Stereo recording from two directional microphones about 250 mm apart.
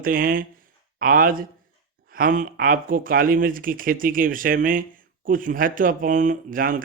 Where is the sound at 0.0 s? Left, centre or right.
Right.